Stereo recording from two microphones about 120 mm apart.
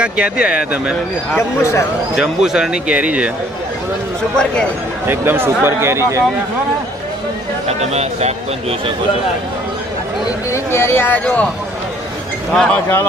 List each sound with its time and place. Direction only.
0.0 s speech: 10° right (ahead or behind)
1.4 s speech: 25° left (ahead or behind)
2.1 s speech: 5° right (ahead or behind)
5.0 s speech: 20° right (ahead or behind)
7.7 s speech: 65° right (ahead or behind)
10.5 s speech: 20° left (ahead or behind)
12.5 s speech: 10° left (ahead or behind)